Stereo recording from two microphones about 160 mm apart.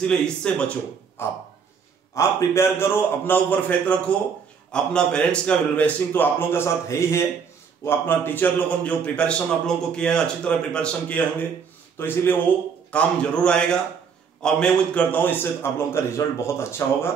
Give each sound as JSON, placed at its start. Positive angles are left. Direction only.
{"t": 0.0, "sound": "a man's voice", "side_deg": 5}